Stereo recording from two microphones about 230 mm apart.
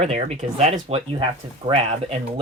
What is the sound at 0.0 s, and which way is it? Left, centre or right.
Speech, right.